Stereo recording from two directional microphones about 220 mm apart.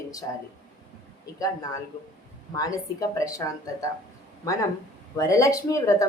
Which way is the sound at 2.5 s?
15° left (ahead or behind).